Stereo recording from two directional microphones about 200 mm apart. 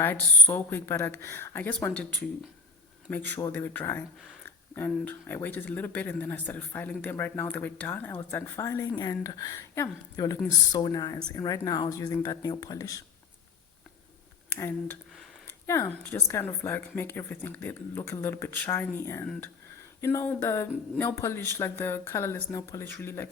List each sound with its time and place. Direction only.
0.0 s speech: 10° left (ahead or behind)
3.3 s speech: 10° left (ahead or behind)
14.5 s speech: 10° left (ahead or behind)